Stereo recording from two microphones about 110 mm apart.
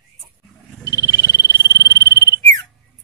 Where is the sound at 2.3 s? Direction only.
35° left (ahead or behind).